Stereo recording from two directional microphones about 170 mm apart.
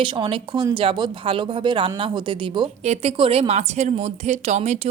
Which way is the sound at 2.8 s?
40° right (ahead or behind).